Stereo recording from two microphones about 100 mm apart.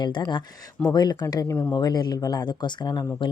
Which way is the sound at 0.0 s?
50° left (ahead or behind).